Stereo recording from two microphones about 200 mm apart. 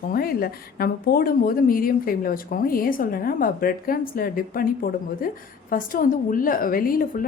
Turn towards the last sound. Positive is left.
turn(degrees=45)  # may be behind; listen again after turning